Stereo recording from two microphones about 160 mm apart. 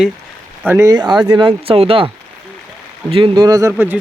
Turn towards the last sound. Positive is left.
turn(degrees=-15)  # may be behind; listen again after turning